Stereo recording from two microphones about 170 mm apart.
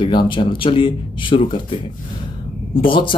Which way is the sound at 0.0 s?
30° left (ahead or behind).